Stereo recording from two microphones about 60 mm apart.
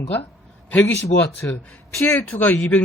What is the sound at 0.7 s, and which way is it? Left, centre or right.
Speech, left.